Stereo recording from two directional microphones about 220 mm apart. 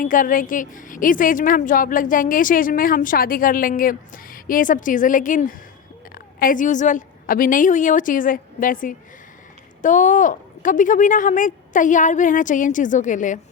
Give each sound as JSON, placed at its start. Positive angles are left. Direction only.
{"t": 0.0, "sound": "a woman's voice", "side_deg": 40}